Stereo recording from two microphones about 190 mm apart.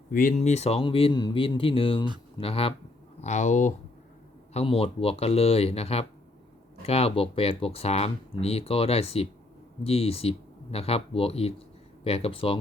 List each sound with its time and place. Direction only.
0.1 s speech: 45° left (ahead or behind); by 12.5 s 30° left (ahead or behind)